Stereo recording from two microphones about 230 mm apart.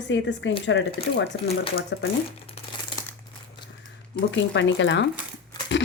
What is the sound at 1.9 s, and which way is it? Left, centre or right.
Speech, left.